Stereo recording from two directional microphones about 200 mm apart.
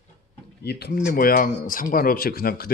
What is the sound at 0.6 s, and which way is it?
Speech, 55° left (ahead or behind).